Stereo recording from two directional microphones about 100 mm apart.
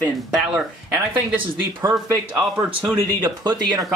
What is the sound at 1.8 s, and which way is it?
Speech, 30° right (ahead or behind).